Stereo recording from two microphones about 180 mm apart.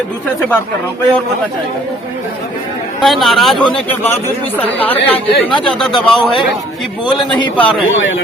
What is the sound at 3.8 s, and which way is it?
A man's voice, 10° left (ahead or behind).